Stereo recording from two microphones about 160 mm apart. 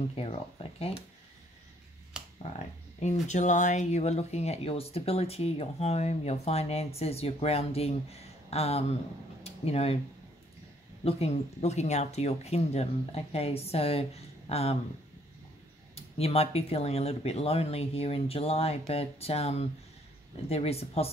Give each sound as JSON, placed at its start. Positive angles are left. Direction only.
{"t": 0.1, "sound": "speech", "side_deg": 40}
{"t": 3.0, "sound": "speech", "side_deg": 45}
{"t": 9.4, "sound": "a sound", "side_deg": 40}
{"t": 11.1, "sound": "speech", "side_deg": 40}
{"t": 15.9, "sound": "speech", "side_deg": 40}